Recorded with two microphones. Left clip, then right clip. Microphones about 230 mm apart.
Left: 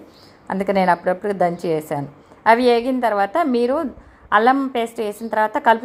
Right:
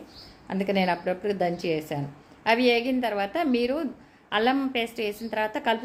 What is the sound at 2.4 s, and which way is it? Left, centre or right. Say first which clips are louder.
A woman's voice: left 8 dB; centre.